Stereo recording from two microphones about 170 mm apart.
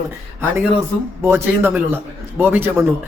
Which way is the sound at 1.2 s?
15° right (ahead or behind).